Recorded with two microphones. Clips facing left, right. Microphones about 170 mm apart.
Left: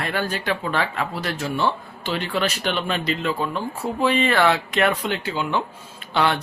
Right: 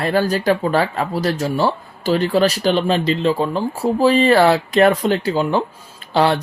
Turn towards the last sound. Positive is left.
turn(degrees=-35)  # may be behind; listen again after turning